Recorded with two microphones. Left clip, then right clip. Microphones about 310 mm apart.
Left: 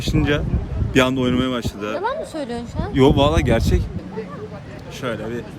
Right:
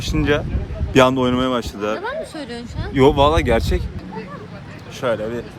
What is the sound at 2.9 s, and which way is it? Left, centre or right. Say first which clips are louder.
Speech: right 2 dB; centre.